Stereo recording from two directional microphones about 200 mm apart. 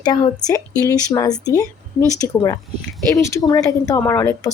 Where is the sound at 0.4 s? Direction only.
15° left (ahead or behind).